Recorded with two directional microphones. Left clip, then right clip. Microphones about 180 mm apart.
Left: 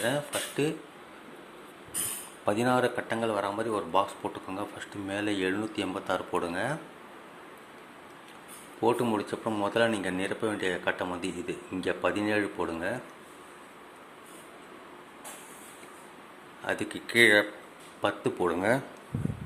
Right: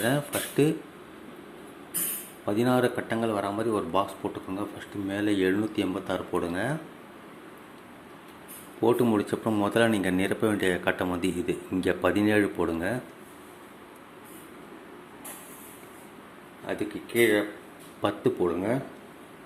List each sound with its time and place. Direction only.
0.0 s speech: 10° right (ahead or behind)
2.4 s speech: 15° left (ahead or behind)
2.6 s speech: centre (ahead or behind)
8.8 s speech: centre (ahead or behind)
16.6 s speech: 25° left (ahead or behind)
18.0 s speech: 5° left (ahead or behind)